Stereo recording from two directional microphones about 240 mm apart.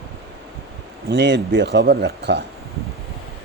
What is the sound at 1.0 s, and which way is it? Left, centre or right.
Speech, right.